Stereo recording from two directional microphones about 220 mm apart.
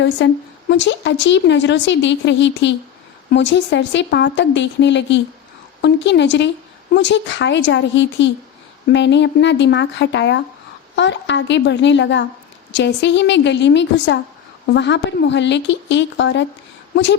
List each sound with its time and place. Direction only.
0.2 s a woman's voice: 55° left (ahead or behind)